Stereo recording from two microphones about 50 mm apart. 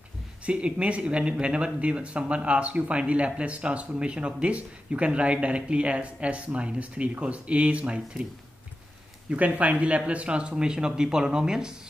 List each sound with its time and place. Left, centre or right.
0.5 s speech: right
9.3 s speech: right; by 11.7 s centre